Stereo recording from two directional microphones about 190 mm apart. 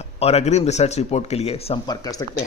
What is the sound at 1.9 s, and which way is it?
Speech, 20° left (ahead or behind).